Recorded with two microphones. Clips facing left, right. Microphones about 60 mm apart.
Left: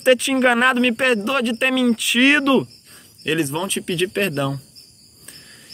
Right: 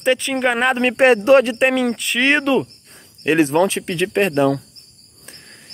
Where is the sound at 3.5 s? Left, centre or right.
Right.